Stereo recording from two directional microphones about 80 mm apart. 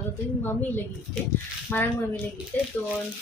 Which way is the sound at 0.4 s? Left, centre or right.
Left.